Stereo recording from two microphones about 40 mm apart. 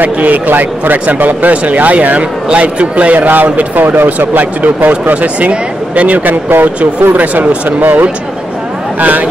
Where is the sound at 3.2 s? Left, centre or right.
Right.